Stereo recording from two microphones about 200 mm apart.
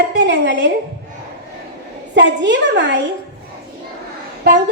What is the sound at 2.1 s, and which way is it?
Speech, 65° right (ahead or behind).